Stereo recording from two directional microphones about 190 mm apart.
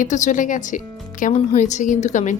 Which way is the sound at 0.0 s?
40° left (ahead or behind).